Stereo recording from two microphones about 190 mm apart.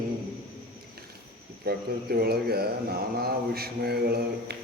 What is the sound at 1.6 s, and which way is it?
A man's voice, 55° right (ahead or behind).